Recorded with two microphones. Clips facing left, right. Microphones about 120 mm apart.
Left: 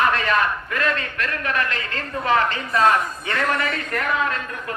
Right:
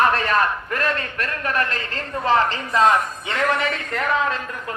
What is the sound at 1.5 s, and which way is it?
A woman's voice, 35° right (ahead or behind).